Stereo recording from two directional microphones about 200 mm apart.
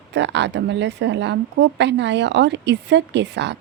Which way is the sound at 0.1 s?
60° right (ahead or behind).